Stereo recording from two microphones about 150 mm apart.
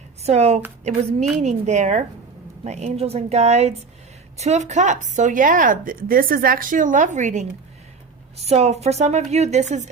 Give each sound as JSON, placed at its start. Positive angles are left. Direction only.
{"t": 0.2, "sound": "a woman's voice", "side_deg": -45}